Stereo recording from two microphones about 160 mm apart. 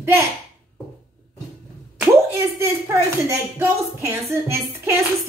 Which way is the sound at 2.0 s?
15° right (ahead or behind).